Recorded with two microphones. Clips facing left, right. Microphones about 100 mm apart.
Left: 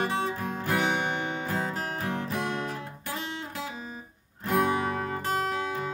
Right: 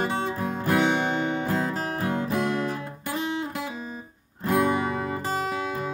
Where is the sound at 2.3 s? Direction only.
Centre (ahead or behind).